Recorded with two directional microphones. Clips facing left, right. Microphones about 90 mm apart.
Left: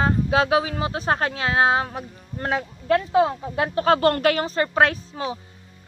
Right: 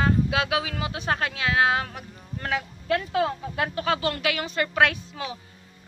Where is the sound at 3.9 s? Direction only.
50° left (ahead or behind); by 5.3 s 35° left (ahead or behind).